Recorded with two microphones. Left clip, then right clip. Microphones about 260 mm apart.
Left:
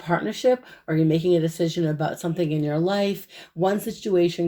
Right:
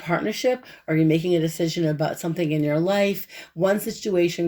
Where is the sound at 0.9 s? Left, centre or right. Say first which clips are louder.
Even; right.